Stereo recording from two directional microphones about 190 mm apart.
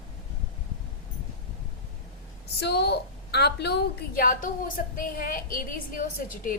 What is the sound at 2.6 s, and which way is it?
A woman's voice, 60° left (ahead or behind).